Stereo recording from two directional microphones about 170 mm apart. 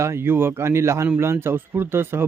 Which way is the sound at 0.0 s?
15° right (ahead or behind).